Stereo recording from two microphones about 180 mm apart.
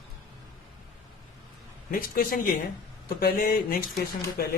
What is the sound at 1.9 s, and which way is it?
Speech, 50° left (ahead or behind).